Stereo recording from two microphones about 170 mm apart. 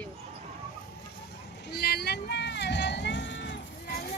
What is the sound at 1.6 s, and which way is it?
Vehicle, 70° left (ahead or behind).